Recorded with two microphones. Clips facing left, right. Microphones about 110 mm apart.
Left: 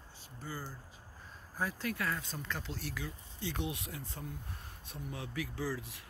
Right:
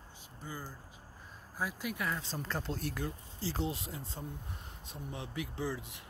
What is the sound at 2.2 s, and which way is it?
Speech, 35° right (ahead or behind).